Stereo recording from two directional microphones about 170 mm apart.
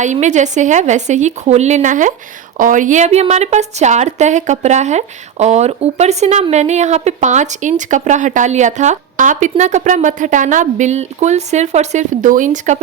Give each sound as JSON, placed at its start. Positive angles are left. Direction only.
{"t": 0.0, "sound": "speech", "side_deg": -45}